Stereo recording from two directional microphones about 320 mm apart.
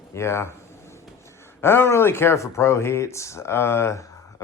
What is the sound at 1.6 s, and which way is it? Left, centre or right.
Speech, centre.